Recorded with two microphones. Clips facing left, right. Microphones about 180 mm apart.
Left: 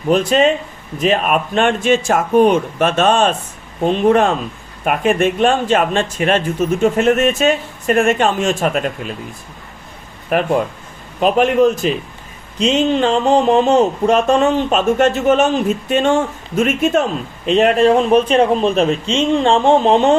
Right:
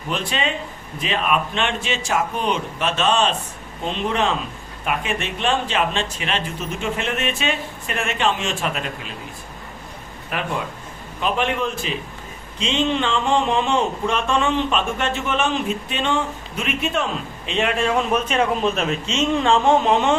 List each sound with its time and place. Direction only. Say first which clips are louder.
0.1 s speech: left 12 dB; 45° left (ahead or behind)
10.2 s speech: left 10 dB; 50° left (ahead or behind); by 20.1 s 35° left (ahead or behind)